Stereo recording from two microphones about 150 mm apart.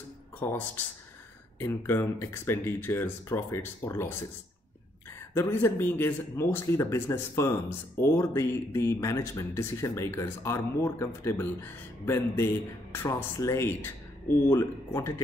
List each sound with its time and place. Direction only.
0.4 s speech: 10° left (ahead or behind)
5.3 s speech: 15° left (ahead or behind)